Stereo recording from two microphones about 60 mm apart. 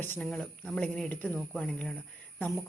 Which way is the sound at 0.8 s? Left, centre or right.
Centre.